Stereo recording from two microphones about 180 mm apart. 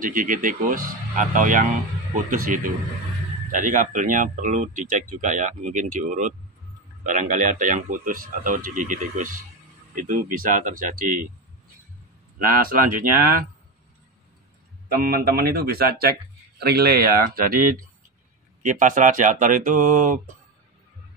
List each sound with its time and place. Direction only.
0.0 s speech: 50° right (ahead or behind)
12.4 s speech: 50° right (ahead or behind)
15.0 s speech: 55° right (ahead or behind)